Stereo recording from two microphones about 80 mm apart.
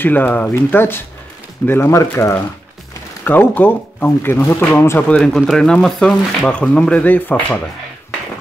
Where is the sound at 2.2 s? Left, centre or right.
Left.